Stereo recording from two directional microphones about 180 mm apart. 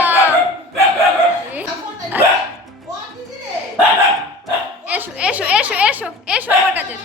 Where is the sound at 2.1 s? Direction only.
10° right (ahead or behind).